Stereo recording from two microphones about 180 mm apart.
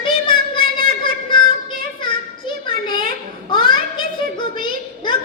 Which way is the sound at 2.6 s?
25° left (ahead or behind).